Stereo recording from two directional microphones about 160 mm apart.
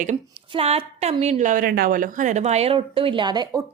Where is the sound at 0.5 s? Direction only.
35° right (ahead or behind).